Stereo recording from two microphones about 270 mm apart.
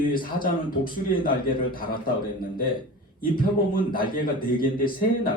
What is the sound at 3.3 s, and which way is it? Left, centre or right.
A man's voice, left.